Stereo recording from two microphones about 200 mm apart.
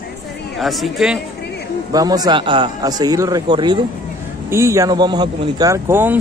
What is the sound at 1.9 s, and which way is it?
Speech, 20° right (ahead or behind).